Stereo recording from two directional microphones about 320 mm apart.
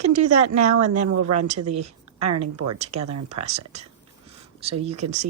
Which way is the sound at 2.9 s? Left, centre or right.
Right.